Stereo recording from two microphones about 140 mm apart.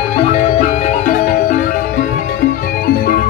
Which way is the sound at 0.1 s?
55° left (ahead or behind).